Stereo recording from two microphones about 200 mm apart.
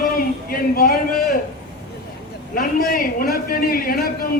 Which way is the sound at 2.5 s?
45° left (ahead or behind).